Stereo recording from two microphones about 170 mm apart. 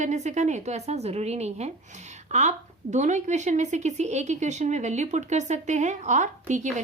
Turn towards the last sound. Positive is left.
turn(degrees=-45)  # may be behind; listen again after turning